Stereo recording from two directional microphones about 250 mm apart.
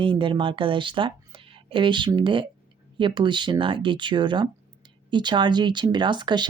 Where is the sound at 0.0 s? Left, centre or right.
Centre.